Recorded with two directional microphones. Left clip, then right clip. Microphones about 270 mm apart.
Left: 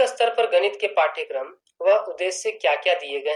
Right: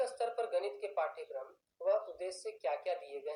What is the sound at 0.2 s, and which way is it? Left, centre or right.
Speech, left.